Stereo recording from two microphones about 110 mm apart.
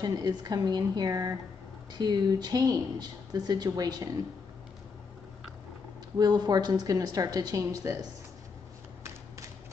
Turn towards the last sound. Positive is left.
turn(degrees=-30)  # may be behind; listen again after turning